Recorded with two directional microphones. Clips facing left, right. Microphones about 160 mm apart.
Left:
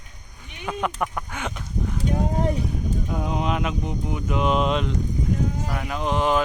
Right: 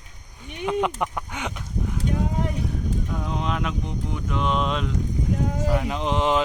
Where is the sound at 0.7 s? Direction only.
20° right (ahead or behind).